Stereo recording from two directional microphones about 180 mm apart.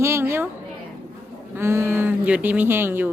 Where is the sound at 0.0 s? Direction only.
15° right (ahead or behind).